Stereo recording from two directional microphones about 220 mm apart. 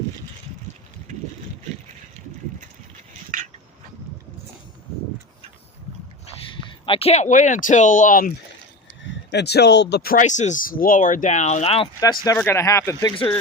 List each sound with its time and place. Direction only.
6.5 s speech: 25° left (ahead or behind)
9.0 s speech: 50° left (ahead or behind); by 13.3 s 20° left (ahead or behind)